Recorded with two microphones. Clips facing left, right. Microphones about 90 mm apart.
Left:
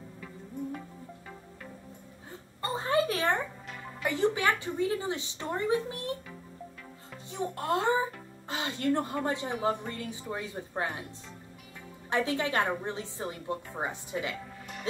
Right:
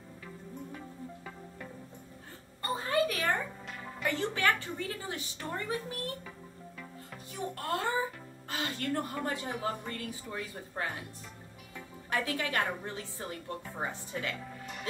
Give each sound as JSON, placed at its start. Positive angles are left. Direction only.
{"t": 2.6, "sound": "a sound", "side_deg": 25}
{"t": 4.0, "sound": "a woman's voice", "side_deg": 15}
{"t": 7.3, "sound": "a child's voice", "side_deg": 20}
{"t": 12.1, "sound": "a woman's voice", "side_deg": 25}